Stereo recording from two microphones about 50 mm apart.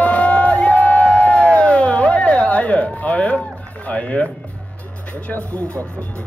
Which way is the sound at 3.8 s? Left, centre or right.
Left.